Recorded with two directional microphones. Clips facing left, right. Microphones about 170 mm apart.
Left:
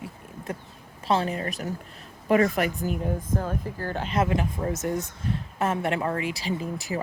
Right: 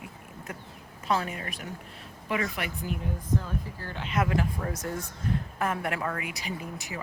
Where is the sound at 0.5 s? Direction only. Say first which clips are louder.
Left 7 dB; 30° left (ahead or behind).